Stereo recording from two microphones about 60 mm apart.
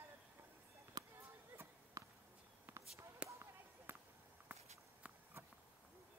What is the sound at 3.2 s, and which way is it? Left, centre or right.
Basketball bounce, centre.